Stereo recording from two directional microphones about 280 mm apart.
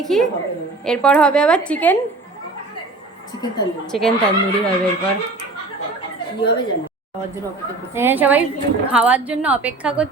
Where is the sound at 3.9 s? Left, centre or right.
Centre.